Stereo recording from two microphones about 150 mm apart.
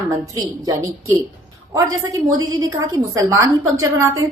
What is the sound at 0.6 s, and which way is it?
A woman's voice, 20° right (ahead or behind).